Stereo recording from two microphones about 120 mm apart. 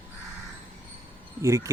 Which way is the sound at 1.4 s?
25° right (ahead or behind).